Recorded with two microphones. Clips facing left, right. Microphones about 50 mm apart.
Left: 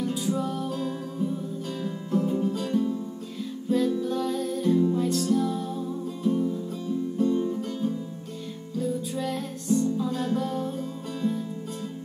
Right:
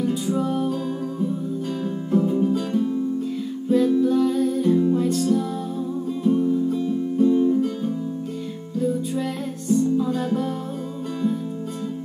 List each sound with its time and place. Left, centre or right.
0.4 s music: centre
1.8 s music: centre
6.3 s music: centre
8.7 s music: centre